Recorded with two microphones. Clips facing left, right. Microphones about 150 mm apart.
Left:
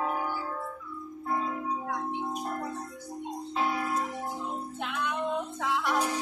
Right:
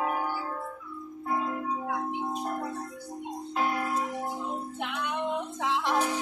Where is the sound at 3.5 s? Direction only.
5° right (ahead or behind).